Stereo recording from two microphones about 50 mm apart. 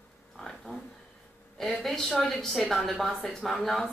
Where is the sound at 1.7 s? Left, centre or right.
Centre.